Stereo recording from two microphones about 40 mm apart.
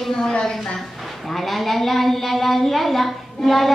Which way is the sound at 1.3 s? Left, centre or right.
Centre.